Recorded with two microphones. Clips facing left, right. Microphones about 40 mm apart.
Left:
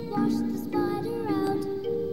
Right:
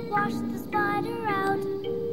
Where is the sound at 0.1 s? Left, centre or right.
Right.